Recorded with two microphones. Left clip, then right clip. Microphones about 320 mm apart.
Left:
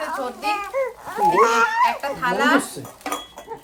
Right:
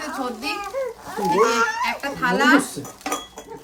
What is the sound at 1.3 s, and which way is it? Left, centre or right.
Speech, left.